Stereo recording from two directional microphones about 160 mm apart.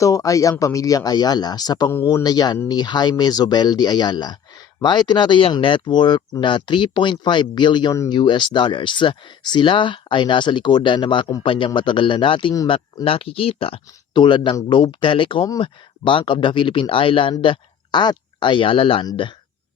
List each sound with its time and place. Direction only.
0.0 s speech: 20° left (ahead or behind)